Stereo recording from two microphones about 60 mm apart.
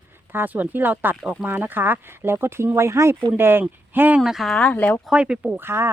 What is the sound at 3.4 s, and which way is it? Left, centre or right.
Speech, right.